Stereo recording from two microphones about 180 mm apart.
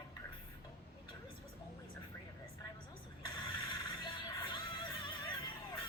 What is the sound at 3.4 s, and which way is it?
Music, 25° left (ahead or behind).